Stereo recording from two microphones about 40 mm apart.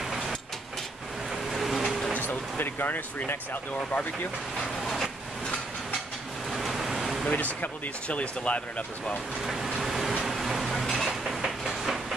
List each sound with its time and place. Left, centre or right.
0.0 s train: centre
1.3 s vehicle: centre
2.1 s a sound: left
3.9 s speech: left
6.5 s vehicle: centre
7.3 s speech: left
9.4 s speech: centre
9.8 s vehicle: centre
10.3 s dishes: centre
11.2 s a sound: centre